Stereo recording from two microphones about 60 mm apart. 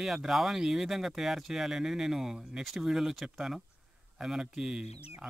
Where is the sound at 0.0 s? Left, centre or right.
Centre.